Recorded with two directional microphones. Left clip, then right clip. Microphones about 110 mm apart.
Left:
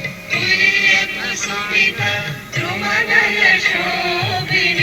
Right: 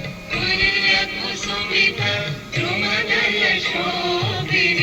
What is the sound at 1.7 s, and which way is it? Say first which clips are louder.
Music: left 3 dB; 30° left (ahead or behind).